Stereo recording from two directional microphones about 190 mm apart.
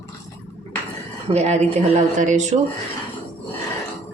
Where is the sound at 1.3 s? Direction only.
35° right (ahead or behind).